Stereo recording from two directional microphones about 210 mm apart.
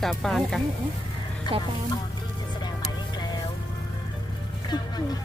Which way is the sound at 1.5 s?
20° left (ahead or behind).